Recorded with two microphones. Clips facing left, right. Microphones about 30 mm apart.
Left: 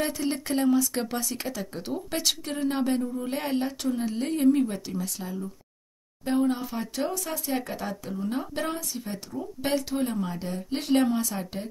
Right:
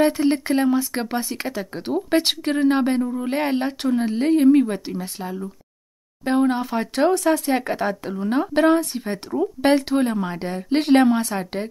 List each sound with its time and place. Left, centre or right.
0.0 s speech: right